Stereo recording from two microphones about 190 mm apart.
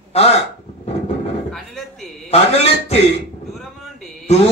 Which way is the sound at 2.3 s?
35° left (ahead or behind).